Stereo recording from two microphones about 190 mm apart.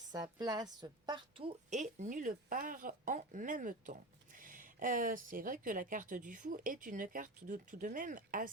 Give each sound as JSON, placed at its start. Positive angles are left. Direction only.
{"t": 0.1, "sound": "a woman's voice", "side_deg": -20}